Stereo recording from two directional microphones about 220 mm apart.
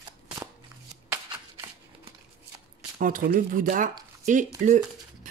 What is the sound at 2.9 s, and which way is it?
Speech, 40° right (ahead or behind).